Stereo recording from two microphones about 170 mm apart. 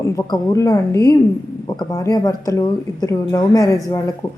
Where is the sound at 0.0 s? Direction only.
20° left (ahead or behind).